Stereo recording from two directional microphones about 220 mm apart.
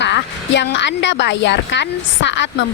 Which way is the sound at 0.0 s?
55° left (ahead or behind).